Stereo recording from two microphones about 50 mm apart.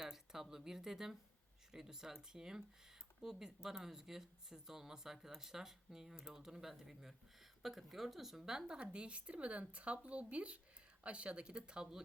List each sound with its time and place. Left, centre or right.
0.0 s a woman's voice: centre